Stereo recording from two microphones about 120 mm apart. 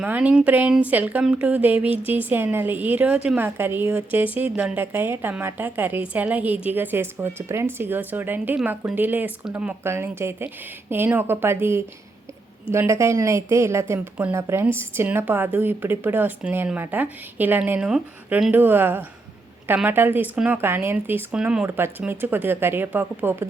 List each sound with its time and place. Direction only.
0.0 s a woman's voice: 10° right (ahead or behind)
9.8 s a woman's voice: 20° right (ahead or behind)
18.5 s a woman's voice: 15° right (ahead or behind)